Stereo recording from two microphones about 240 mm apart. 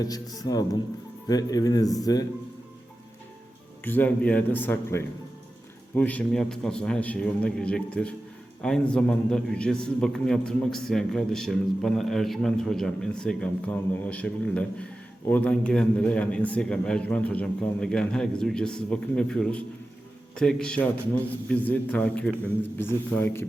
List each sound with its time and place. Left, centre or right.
0.0 s a man's voice: centre
3.8 s a man's voice: centre